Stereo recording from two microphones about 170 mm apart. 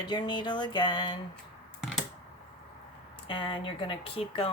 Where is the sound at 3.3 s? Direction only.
30° left (ahead or behind).